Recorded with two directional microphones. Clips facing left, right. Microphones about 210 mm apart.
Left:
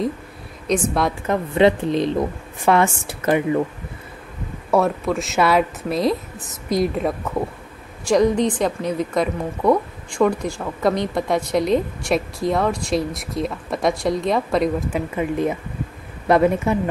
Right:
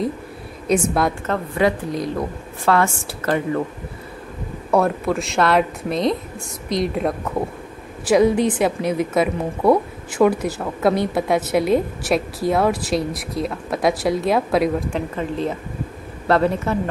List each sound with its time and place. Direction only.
0.7 s a woman's voice: centre (ahead or behind)
1.2 s a woman's voice: 20° left (ahead or behind)
4.6 s a woman's voice: centre (ahead or behind)
14.9 s speech: 10° left (ahead or behind)